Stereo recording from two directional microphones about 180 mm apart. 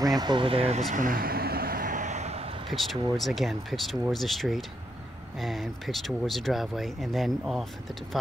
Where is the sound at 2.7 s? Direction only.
Centre (ahead or behind).